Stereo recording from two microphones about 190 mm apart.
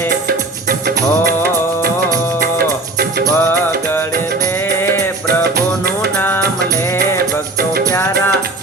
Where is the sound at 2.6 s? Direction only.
50° right (ahead or behind).